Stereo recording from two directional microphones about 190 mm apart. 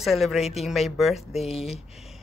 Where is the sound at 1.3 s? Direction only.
35° left (ahead or behind).